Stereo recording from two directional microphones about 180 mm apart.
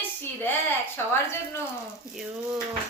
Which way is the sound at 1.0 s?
15° left (ahead or behind).